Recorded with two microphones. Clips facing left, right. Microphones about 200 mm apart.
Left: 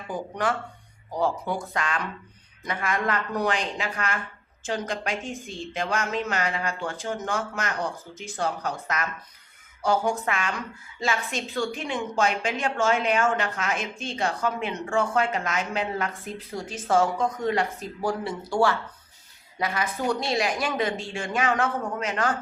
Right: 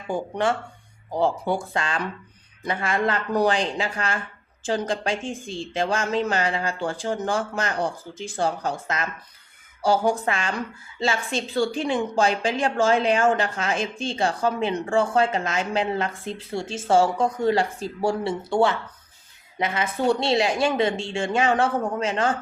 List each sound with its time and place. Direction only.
0.1 s a woman's voice: 25° right (ahead or behind)